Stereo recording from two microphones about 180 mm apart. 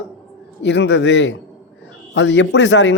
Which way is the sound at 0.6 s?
70° left (ahead or behind).